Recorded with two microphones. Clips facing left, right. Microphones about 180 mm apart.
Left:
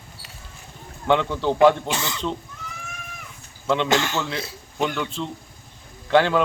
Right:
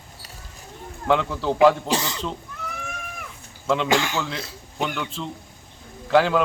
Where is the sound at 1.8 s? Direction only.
35° right (ahead or behind).